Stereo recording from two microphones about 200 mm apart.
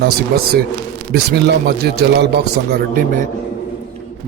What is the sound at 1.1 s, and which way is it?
A man's voice, 50° right (ahead or behind).